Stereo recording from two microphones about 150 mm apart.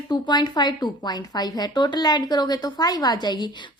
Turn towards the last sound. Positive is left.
turn(degrees=30)  # may be behind; listen again after turning